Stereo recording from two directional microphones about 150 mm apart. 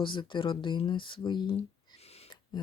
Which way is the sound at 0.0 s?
30° left (ahead or behind).